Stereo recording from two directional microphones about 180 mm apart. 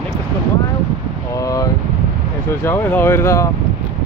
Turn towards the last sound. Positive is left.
turn(degrees=15)  # may be behind; listen again after turning